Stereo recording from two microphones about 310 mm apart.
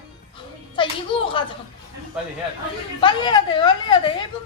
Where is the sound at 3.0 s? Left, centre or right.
Centre.